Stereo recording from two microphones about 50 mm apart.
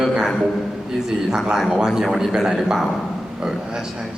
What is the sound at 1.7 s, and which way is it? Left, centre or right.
A man's voice, centre.